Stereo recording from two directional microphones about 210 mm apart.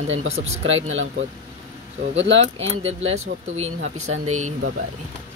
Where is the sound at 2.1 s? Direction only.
60° right (ahead or behind).